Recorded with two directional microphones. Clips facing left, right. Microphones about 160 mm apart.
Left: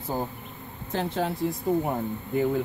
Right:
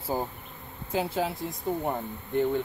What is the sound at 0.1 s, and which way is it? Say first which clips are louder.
Bee: even; 10° right (ahead or behind).